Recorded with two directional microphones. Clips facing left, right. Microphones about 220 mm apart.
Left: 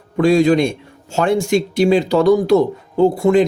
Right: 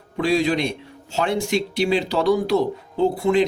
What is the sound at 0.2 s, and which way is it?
Speech, 45° left (ahead or behind).